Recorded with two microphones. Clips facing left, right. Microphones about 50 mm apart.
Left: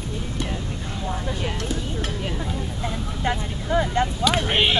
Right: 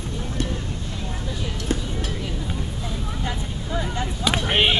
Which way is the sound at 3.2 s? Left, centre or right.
Left.